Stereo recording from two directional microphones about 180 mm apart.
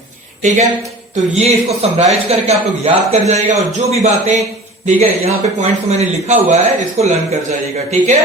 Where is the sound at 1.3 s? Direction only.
35° right (ahead or behind).